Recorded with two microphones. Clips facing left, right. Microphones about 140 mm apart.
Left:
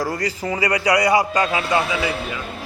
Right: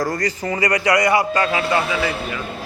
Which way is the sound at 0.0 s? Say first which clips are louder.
Right 1 dB; 10° left (ahead or behind).